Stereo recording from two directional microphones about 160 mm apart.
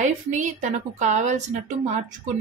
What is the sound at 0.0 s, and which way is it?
Speech, 50° right (ahead or behind).